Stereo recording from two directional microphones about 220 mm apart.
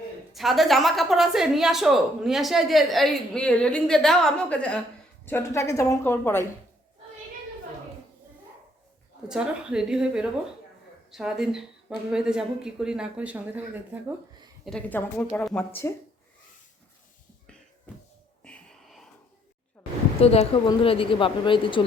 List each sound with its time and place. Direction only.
0.3 s a woman's voice: centre (ahead or behind)
9.3 s a woman's voice: 5° right (ahead or behind)
14.6 s a woman's voice: 5° left (ahead or behind)
17.9 s a sound: 10° left (ahead or behind)
20.2 s speech: 25° left (ahead or behind)